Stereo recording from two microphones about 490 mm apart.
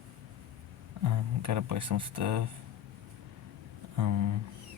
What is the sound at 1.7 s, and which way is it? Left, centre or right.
Speech, right.